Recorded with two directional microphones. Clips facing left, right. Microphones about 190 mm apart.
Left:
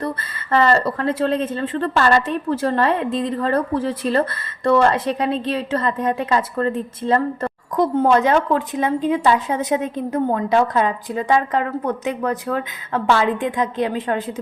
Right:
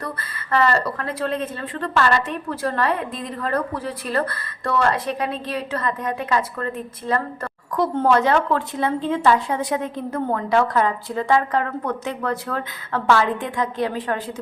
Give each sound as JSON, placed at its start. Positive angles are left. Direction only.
{"t": 0.0, "sound": "speech", "side_deg": 25}